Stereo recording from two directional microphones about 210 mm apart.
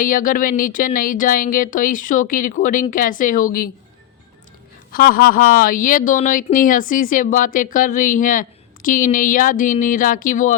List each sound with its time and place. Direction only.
0.0 s speech: 40° left (ahead or behind)
4.9 s speech: 45° left (ahead or behind)